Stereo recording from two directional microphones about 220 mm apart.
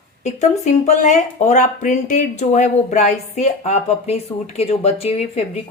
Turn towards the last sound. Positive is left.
turn(degrees=30)  # may be behind; listen again after turning